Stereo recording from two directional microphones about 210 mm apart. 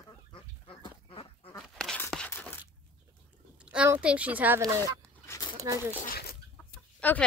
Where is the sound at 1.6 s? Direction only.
Centre (ahead or behind).